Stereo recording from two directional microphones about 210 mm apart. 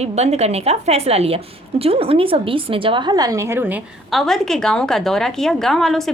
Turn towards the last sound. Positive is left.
turn(degrees=0)  # may be behind; listen again after turning